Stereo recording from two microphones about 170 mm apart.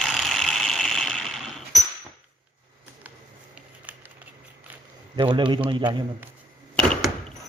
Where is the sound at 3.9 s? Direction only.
10° right (ahead or behind).